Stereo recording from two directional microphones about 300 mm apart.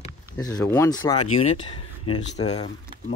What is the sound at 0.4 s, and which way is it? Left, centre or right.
Speech, centre.